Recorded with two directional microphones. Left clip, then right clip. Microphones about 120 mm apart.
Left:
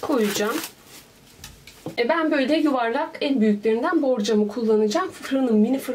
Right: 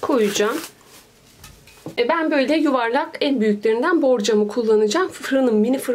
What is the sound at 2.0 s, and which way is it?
A woman's voice, 35° right (ahead or behind).